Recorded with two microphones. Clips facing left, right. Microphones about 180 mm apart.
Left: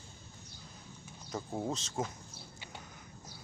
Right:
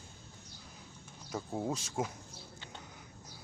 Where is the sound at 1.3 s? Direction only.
5° right (ahead or behind).